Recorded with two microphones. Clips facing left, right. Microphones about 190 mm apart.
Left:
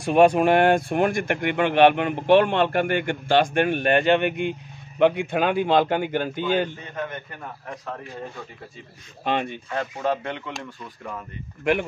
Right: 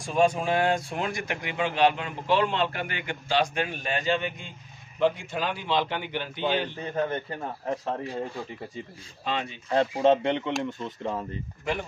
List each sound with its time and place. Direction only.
0.0 s speech: 65° left (ahead or behind); by 6.7 s 45° left (ahead or behind)
6.8 s a man's voice: 30° right (ahead or behind)
9.2 s speech: 60° left (ahead or behind)
10.0 s a man's voice: 25° right (ahead or behind)